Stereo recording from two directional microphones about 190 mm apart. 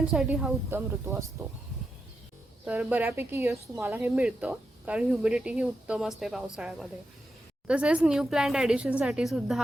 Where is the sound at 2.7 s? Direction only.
5° right (ahead or behind).